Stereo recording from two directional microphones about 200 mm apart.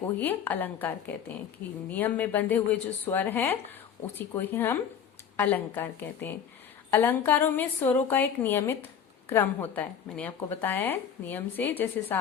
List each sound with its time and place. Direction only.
0.2 s a woman's voice: 10° left (ahead or behind)